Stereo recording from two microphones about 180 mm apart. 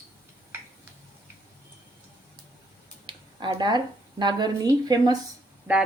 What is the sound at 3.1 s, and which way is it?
Speech, 25° right (ahead or behind).